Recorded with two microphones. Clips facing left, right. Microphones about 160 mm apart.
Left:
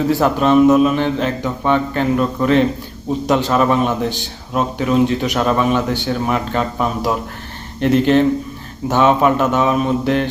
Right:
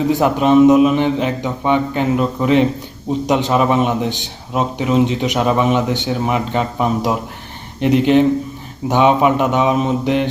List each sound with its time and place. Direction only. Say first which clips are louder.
0.1 s a man's voice: right 1 dB; 15° right (ahead or behind)